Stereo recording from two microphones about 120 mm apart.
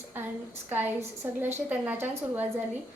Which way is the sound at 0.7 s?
15° right (ahead or behind).